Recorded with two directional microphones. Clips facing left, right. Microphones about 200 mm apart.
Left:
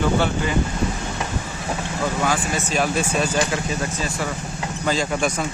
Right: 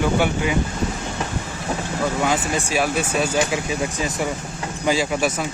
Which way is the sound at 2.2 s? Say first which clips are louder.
Right 1 dB; 15° right (ahead or behind).